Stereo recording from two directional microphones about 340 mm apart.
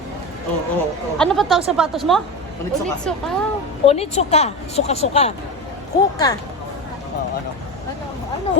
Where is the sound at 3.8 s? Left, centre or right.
Centre.